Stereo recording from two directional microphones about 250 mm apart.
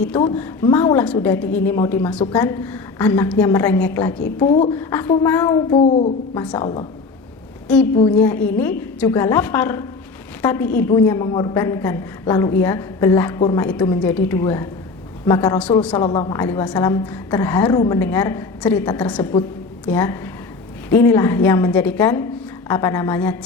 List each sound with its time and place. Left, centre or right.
0.3 s a woman's voice: centre
4.4 s a woman's voice: centre
6.3 s a woman's voice: centre
8.2 s a woman's voice: centre
16.0 s a woman's voice: centre
19.2 s a woman's voice: centre